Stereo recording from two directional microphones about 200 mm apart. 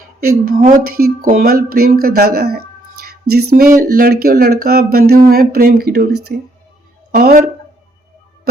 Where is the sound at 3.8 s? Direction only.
45° right (ahead or behind).